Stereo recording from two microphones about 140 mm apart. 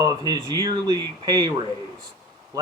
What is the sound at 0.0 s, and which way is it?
Speech, 25° right (ahead or behind).